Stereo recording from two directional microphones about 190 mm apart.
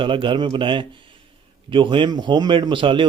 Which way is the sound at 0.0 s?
25° right (ahead or behind).